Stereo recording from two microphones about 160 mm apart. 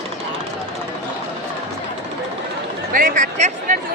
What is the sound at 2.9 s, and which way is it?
Speech, 60° right (ahead or behind).